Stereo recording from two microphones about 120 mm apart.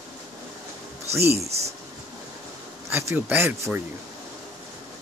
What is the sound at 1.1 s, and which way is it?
Speech, 20° right (ahead or behind).